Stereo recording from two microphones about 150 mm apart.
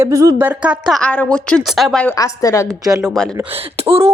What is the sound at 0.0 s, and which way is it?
Speech, 20° right (ahead or behind).